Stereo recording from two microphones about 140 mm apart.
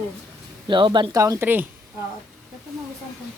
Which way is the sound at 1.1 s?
20° right (ahead or behind).